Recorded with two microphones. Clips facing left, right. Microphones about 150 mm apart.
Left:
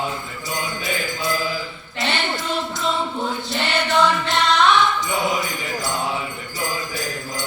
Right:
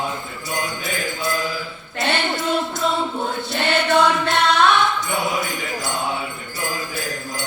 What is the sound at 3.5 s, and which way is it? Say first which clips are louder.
Music: right 5 dB; 55° right (ahead or behind).